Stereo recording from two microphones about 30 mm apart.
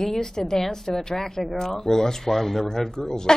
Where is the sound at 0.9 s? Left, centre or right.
Centre.